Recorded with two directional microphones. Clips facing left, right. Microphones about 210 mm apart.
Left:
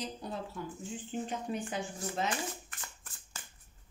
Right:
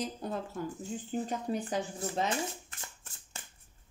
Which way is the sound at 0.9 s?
40° right (ahead or behind).